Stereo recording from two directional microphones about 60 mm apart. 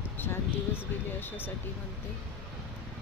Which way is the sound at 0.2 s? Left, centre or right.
Left.